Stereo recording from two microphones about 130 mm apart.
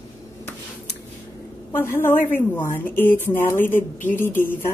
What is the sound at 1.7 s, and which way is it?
Speech, 15° left (ahead or behind).